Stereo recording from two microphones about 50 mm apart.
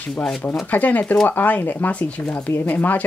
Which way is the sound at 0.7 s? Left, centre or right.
Left.